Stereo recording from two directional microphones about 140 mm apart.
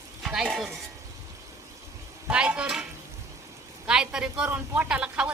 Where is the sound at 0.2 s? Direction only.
5° right (ahead or behind).